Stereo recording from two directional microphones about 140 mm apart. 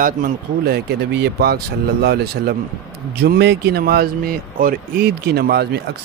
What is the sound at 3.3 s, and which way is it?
Speech, 90° right.